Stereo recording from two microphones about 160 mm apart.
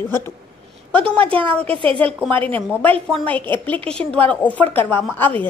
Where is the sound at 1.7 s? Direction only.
35° right (ahead or behind).